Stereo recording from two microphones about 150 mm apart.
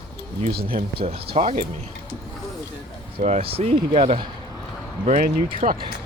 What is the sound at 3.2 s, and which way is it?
Speech, 45° right (ahead or behind).